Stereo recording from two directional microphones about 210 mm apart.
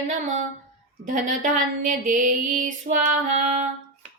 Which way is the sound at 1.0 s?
40° right (ahead or behind).